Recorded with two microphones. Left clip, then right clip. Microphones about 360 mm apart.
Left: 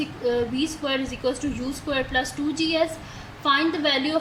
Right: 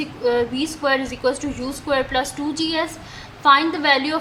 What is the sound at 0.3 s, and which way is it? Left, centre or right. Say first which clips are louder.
A woman's voice: right 4 dB; right.